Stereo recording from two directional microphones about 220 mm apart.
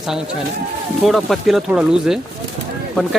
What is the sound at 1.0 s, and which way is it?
Speech, centre (ahead or behind).